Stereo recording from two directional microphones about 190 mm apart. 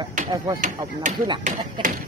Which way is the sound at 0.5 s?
45° right (ahead or behind).